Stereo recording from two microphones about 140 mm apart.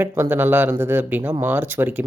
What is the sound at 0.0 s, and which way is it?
Speech, 15° right (ahead or behind).